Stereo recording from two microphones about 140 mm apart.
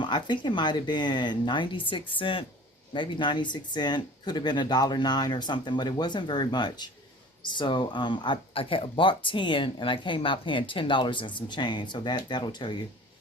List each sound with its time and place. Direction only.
0.0 s speech: 35° left (ahead or behind)